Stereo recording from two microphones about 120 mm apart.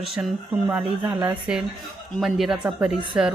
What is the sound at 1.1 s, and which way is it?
Speech, 30° right (ahead or behind).